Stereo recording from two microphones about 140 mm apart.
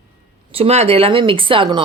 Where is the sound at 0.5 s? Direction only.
45° right (ahead or behind).